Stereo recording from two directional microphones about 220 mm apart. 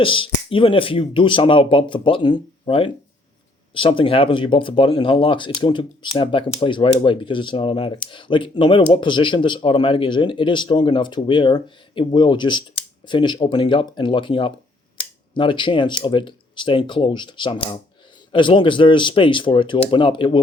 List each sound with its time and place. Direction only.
0.0 s speech: 25° left (ahead or behind)